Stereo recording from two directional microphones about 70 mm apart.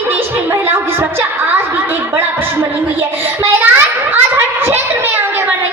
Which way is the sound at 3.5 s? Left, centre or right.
Right.